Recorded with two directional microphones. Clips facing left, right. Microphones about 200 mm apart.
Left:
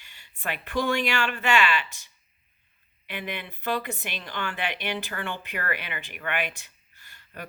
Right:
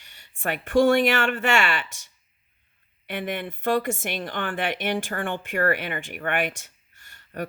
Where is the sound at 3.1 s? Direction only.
50° right (ahead or behind).